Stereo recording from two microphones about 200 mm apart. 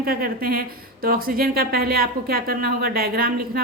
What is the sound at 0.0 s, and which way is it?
Speech, 45° right (ahead or behind).